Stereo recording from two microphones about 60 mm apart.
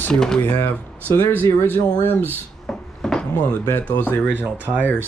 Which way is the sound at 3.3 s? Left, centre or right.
Left.